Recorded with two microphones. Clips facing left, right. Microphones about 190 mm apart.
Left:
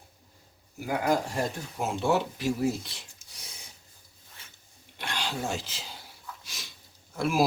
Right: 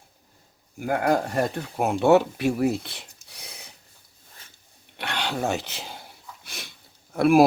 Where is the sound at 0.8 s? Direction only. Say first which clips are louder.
Right 4 dB; 50° right (ahead or behind).